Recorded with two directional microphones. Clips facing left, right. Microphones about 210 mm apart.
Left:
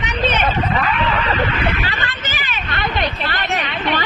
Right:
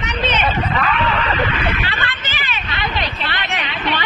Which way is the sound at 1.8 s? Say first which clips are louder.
Even; 45° left (ahead or behind).